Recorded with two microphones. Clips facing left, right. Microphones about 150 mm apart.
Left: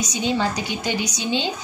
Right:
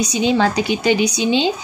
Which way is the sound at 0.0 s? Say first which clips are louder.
Right 6 dB; 80° right.